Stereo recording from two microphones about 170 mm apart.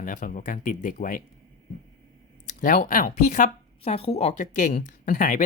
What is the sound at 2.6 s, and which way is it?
Speech, 55° left (ahead or behind).